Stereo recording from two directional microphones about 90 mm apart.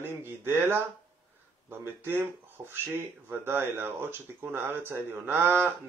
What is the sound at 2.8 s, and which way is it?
Speech, 25° right (ahead or behind).